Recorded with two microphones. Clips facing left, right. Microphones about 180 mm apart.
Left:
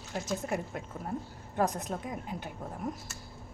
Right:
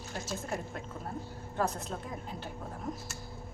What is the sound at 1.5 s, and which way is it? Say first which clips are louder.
Speech: left 3 dB; 15° left (ahead or behind).